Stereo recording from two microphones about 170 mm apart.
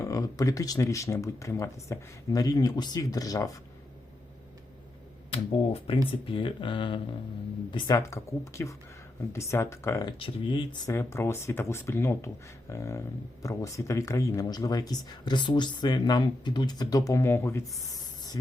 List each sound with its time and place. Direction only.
0.0 s speech: 20° left (ahead or behind)
5.3 s speech: 35° left (ahead or behind)
10.8 s speech: 15° left (ahead or behind)